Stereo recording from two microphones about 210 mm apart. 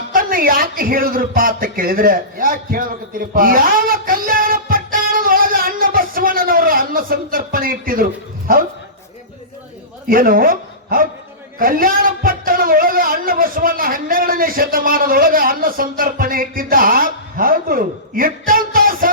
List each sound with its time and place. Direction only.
0.1 s a man's voice: 40° right (ahead or behind)
10.1 s a man's voice: 40° right (ahead or behind)